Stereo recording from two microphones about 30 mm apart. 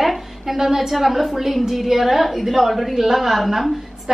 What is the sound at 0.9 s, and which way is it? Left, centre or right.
A woman's voice, centre.